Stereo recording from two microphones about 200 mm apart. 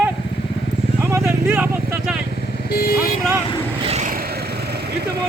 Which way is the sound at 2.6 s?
50° left (ahead or behind).